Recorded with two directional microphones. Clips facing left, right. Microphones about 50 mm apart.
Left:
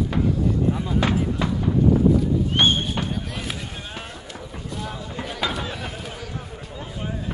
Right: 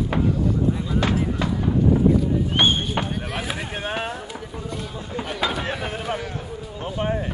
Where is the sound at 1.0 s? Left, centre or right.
Centre.